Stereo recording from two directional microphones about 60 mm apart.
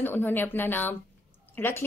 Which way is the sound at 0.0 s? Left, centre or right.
Left.